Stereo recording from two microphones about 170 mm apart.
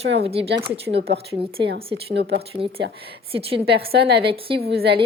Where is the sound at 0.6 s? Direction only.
35° right (ahead or behind).